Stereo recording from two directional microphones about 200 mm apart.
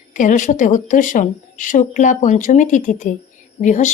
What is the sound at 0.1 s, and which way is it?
A woman's voice, 40° left (ahead or behind).